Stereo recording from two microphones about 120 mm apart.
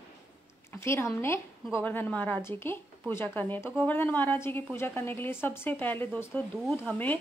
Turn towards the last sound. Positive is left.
turn(degrees=15)  # may be behind; listen again after turning